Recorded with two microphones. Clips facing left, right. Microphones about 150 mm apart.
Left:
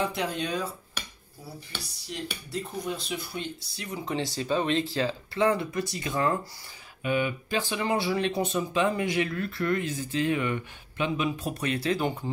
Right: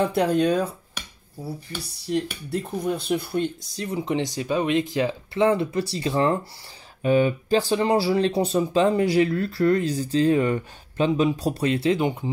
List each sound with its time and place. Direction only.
0.0 s speech: 50° right (ahead or behind)
2.5 s speech: 55° right (ahead or behind)
3.7 s speech: 30° right (ahead or behind)
4.0 s speech: 20° right (ahead or behind)